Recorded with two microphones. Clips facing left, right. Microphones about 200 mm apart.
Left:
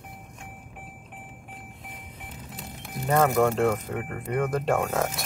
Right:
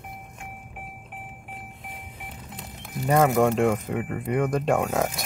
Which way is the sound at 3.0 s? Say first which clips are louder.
Right 2 dB; 15° right (ahead or behind).